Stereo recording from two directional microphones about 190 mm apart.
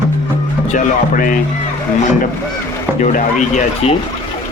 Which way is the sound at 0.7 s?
45° left (ahead or behind).